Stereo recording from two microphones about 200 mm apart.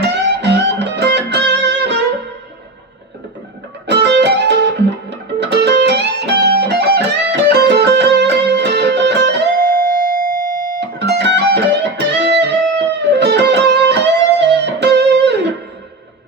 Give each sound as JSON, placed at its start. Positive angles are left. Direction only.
{"t": 0.1, "sound": "music", "side_deg": -60}
{"t": 3.8, "sound": "music", "side_deg": -60}